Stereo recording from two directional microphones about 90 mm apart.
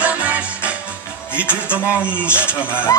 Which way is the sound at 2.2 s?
15° right (ahead or behind).